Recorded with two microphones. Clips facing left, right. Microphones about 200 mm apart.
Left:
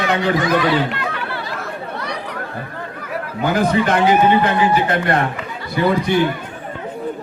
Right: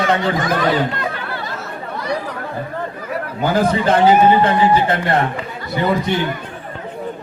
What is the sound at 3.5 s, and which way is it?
A man's voice, 30° right (ahead or behind).